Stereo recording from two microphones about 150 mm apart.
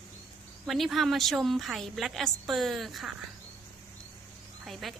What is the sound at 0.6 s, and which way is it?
A woman's voice, centre (ahead or behind).